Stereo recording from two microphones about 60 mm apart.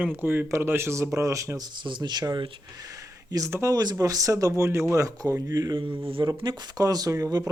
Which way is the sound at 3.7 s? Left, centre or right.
Right.